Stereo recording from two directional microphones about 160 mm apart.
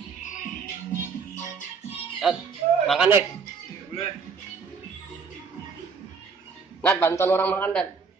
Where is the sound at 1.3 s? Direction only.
50° left (ahead or behind).